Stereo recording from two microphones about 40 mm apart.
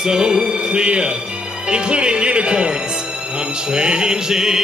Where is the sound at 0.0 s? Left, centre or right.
Centre.